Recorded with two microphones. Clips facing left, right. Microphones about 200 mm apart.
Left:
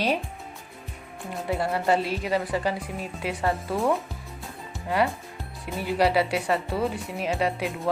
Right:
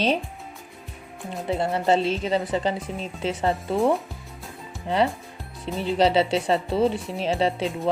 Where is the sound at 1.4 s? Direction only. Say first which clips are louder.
Right 2 dB; 25° right (ahead or behind).